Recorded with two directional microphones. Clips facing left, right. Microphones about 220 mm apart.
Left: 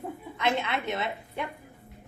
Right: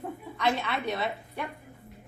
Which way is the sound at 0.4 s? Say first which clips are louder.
Even; 20° left (ahead or behind).